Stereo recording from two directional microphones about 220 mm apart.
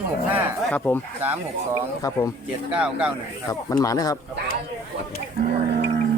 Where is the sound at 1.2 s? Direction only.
10° right (ahead or behind).